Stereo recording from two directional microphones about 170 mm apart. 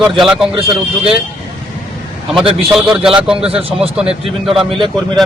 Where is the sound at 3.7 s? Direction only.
5° right (ahead or behind).